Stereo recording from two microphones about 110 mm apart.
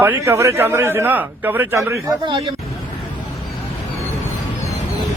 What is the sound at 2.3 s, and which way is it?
Speech, 50° right (ahead or behind).